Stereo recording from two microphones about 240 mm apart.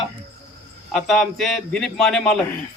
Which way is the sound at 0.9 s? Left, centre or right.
Centre.